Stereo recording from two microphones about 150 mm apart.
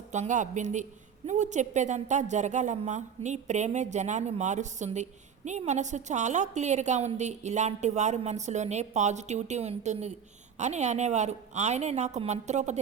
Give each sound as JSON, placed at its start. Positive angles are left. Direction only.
{"t": 0.1, "sound": "a woman's voice", "side_deg": -55}